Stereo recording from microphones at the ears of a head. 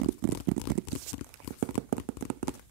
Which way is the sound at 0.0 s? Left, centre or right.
Right.